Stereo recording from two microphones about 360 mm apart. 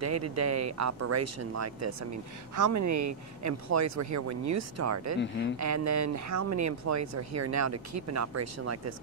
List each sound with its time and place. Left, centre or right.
0.0 s speech: right